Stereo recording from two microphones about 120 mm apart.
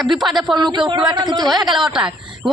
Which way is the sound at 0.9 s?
40° right (ahead or behind).